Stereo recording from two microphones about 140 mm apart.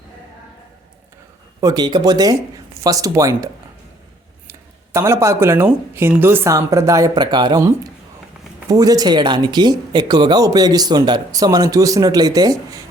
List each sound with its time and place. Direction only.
1.6 s speech: 30° right (ahead or behind)
4.9 s speech: 20° right (ahead or behind)